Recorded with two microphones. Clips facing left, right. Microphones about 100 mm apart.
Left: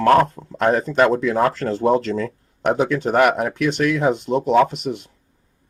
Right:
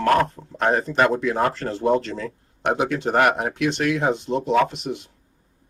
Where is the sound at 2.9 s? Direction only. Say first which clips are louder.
Left 2 dB; 50° left (ahead or behind).